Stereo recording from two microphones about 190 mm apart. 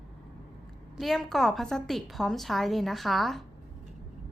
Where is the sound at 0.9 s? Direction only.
Centre (ahead or behind).